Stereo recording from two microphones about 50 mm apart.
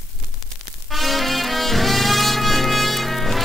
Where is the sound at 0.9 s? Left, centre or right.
Centre.